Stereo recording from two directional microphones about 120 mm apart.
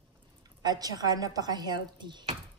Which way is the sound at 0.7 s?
35° right (ahead or behind).